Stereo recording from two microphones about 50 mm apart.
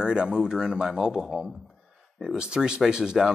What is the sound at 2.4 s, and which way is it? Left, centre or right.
Speech, centre.